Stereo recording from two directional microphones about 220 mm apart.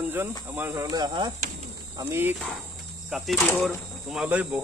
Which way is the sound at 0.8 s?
20° right (ahead or behind).